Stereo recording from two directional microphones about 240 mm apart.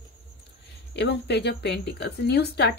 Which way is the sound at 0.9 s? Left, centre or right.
Left.